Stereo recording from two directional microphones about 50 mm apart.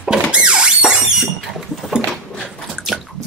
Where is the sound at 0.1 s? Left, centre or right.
Centre.